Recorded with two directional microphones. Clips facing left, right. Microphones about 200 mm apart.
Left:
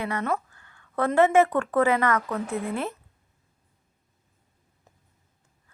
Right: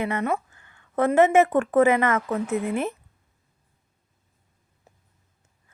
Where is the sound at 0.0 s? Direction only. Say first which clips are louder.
Right 2 dB; 20° right (ahead or behind).